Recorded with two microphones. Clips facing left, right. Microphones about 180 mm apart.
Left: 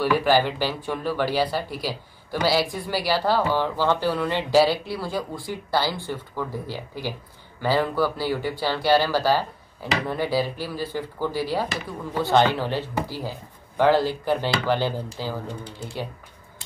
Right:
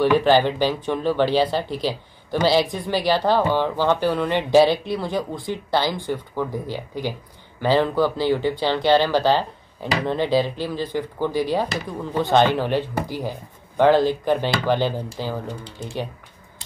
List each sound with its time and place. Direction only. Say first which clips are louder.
0.0 s speech: right 4 dB; 20° right (ahead or behind)